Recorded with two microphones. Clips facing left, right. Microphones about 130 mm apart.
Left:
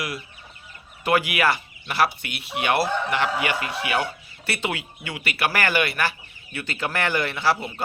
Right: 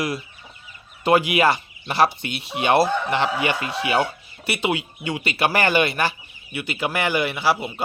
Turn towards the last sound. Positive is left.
turn(degrees=-10)  # may be behind; listen again after turning